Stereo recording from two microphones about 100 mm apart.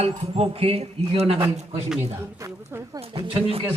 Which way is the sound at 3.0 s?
65° right (ahead or behind).